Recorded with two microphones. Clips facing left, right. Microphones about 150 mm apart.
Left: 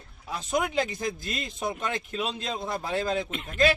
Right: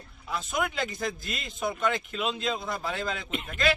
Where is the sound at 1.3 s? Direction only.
35° left (ahead or behind).